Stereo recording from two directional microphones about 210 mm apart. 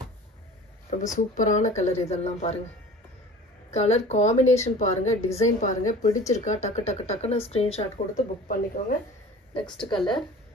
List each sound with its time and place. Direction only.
0.8 s a woman's voice: 35° left (ahead or behind)
3.7 s a woman's voice: 30° left (ahead or behind)
8.5 s a woman's voice: 40° left (ahead or behind)